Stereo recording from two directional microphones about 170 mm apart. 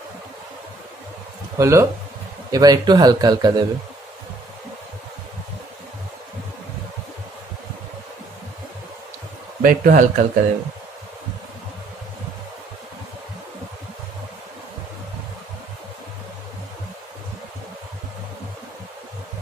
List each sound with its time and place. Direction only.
1.5 s speech: 15° right (ahead or behind)
9.6 s speech: 55° right (ahead or behind)